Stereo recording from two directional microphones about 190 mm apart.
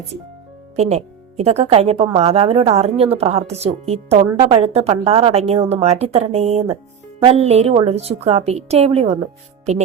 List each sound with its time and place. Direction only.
0.8 s a woman's voice: 35° right (ahead or behind)